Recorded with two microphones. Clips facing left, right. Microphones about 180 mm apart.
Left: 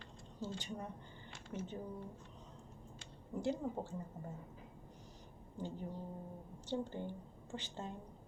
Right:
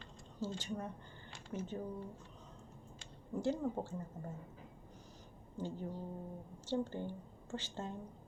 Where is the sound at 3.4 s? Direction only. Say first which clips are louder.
Right 2 dB; 15° left (ahead or behind).